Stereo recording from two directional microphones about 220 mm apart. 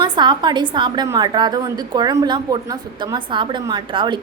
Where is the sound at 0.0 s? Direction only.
20° right (ahead or behind).